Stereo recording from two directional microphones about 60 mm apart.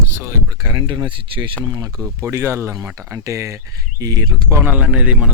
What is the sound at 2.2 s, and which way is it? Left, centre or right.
Speech, right.